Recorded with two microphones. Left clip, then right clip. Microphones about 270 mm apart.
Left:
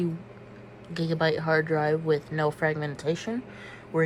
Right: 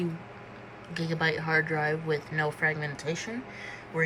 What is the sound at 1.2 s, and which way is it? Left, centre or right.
Speech, centre.